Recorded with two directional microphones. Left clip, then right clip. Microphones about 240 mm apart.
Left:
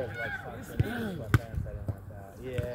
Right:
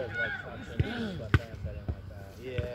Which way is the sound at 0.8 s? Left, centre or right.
Left.